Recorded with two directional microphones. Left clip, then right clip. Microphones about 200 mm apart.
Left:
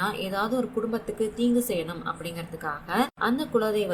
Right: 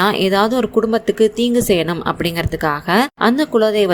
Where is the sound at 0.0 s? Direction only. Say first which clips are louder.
Right 13 dB; 45° right (ahead or behind).